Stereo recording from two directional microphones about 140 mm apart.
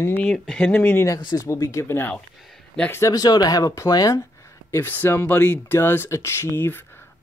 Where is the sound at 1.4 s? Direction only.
20° left (ahead or behind).